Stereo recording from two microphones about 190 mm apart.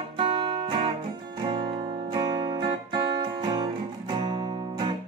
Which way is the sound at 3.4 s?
25° right (ahead or behind).